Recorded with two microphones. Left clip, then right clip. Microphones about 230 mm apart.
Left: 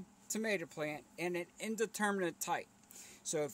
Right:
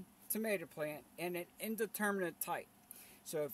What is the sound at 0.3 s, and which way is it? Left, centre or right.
Speech, centre.